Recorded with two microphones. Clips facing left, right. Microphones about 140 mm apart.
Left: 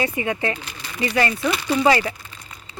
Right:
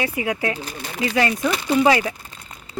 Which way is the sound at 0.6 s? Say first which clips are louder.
Right 5 dB; 45° right (ahead or behind).